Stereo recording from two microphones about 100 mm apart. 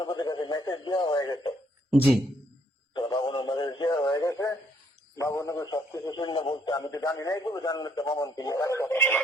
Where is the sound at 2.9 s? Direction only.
55° left (ahead or behind); by 4.5 s 30° left (ahead or behind).